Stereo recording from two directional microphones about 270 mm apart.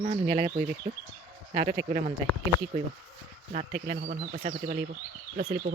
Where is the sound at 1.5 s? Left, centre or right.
Right.